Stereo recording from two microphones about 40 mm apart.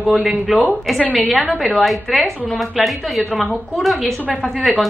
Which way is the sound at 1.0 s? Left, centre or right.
Right.